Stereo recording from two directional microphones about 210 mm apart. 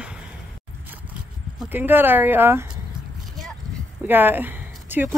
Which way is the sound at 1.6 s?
10° right (ahead or behind).